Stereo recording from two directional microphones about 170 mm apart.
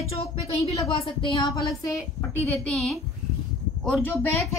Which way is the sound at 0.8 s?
30° left (ahead or behind).